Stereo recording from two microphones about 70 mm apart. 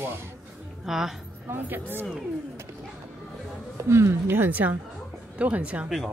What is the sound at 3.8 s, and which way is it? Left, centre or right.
A woman's voice, right.